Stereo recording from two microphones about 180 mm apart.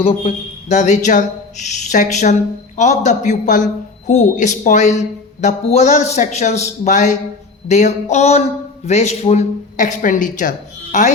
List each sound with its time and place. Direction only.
0.0 s a man's voice: 35° left (ahead or behind)